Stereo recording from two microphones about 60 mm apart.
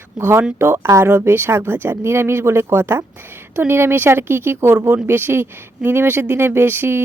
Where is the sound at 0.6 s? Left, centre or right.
Right.